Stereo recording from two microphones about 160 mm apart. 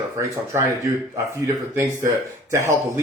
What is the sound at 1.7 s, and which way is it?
A man's voice, 15° right (ahead or behind).